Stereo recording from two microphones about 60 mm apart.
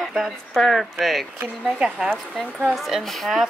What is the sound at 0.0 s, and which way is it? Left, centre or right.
Speech, centre.